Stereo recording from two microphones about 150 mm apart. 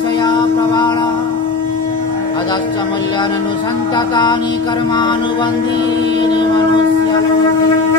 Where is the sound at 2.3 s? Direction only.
30° left (ahead or behind).